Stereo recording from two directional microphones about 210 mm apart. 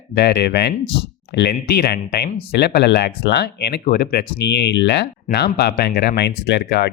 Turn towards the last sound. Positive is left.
turn(degrees=55)  # may be behind; listen again after turning